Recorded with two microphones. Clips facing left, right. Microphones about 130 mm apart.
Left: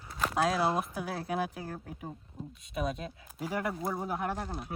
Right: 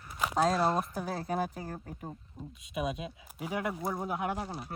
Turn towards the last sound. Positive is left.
turn(degrees=-5)  # may be behind; listen again after turning